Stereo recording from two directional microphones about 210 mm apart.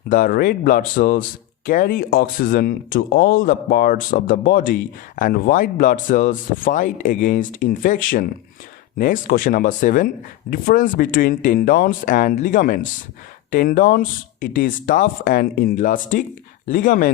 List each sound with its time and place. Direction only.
0.1 s speech: 40° left (ahead or behind)